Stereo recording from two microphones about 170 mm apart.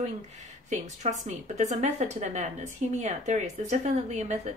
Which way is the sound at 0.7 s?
45° right (ahead or behind).